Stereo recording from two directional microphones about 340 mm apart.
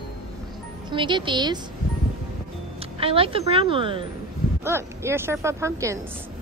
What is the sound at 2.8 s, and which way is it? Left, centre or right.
A woman's voice, centre.